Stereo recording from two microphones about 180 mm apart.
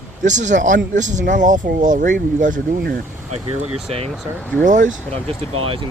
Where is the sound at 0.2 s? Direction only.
45° right (ahead or behind).